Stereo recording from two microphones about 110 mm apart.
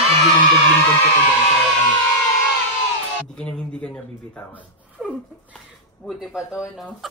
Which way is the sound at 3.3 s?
10° left (ahead or behind).